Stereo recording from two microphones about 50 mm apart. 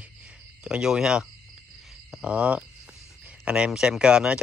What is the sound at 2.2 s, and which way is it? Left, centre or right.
A man's voice, right.